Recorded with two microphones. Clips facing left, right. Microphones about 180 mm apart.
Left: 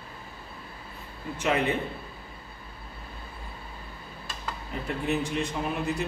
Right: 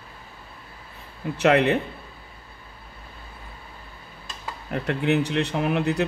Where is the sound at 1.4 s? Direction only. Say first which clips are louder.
Right 7 dB; 70° right (ahead or behind).